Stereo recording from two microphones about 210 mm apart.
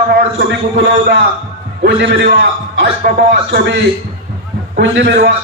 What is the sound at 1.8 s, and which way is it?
A man's voice, 55° right (ahead or behind).